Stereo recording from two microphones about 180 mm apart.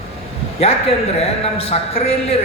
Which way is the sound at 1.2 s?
35° left (ahead or behind).